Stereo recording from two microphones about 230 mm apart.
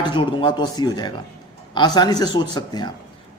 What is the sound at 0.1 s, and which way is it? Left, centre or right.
A man's voice, centre.